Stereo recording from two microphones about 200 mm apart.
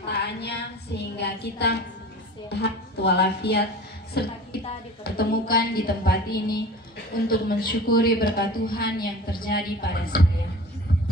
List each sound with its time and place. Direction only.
0.1 s a woman's voice: 55° left (ahead or behind)